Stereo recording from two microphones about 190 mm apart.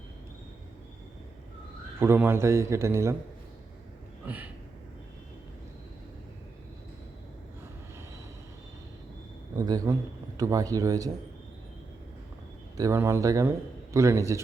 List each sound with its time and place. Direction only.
2.0 s a man's voice: 10° right (ahead or behind)
9.6 s a man's voice: 20° right (ahead or behind)
12.7 s a man's voice: 15° right (ahead or behind)